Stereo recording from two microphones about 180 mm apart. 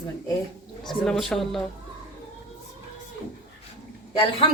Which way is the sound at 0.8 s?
Centre (ahead or behind).